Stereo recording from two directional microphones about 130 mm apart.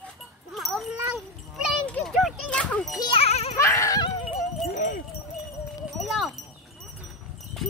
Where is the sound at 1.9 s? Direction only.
10° left (ahead or behind).